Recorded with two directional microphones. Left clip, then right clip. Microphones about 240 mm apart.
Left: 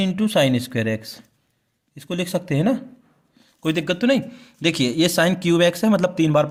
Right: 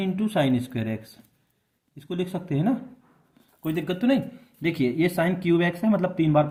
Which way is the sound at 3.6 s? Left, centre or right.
Left.